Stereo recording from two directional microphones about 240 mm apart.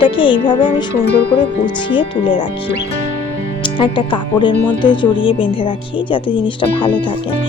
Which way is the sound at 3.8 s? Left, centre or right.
Centre.